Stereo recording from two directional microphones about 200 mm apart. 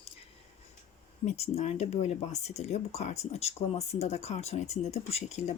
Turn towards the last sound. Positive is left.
turn(degrees=35)  # may be behind; listen again after turning